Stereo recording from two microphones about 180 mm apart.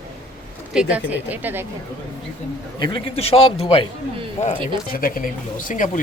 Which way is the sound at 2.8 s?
30° left (ahead or behind).